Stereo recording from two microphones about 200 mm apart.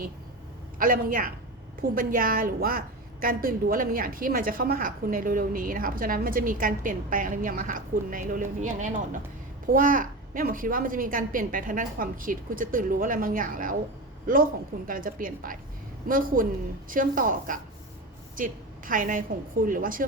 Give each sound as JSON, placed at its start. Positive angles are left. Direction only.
{"t": 0.8, "sound": "a woman's voice", "side_deg": -45}
{"t": 14.8, "sound": "a woman's voice", "side_deg": -45}